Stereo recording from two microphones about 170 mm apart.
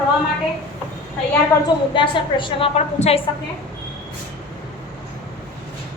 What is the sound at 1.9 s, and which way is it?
A woman's voice, 30° left (ahead or behind).